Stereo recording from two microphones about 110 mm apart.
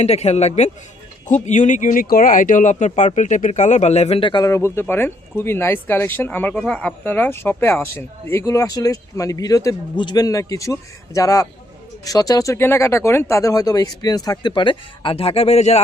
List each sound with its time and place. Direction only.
0.0 s a man's voice: 80° left
4.2 s a man's voice: 45° left (ahead or behind)
4.4 s speech: 25° left (ahead or behind)
9.9 s speech: 45° left (ahead or behind); by 15.8 s 75° left (ahead or behind)